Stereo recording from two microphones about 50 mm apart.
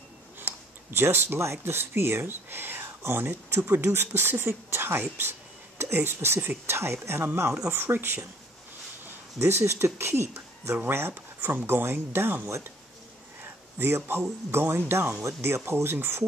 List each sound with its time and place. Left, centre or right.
0.4 s a sound: right
1.0 s speech: right
7.6 s speech: right
9.4 s speech: right
10.9 s speech: right
11.4 s speech: right
13.4 s a sound: right
14.5 s speech: right